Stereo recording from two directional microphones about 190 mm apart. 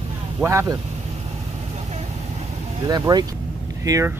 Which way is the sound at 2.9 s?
20° right (ahead or behind).